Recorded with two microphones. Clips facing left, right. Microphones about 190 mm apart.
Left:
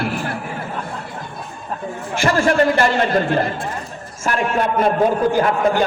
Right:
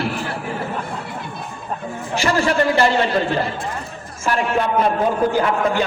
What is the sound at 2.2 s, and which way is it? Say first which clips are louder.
Speech: left 2 dB; 50° left (ahead or behind).